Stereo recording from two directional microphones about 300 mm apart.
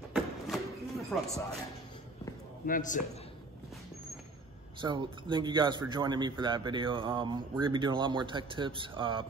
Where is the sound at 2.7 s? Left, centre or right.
Left.